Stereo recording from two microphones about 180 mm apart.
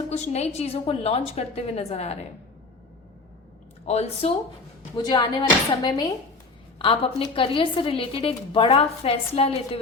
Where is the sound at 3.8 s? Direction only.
35° left (ahead or behind).